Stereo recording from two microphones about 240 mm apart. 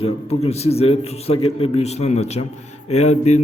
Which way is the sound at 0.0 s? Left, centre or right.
Left.